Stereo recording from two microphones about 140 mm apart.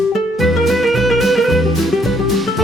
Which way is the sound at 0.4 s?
Centre (ahead or behind).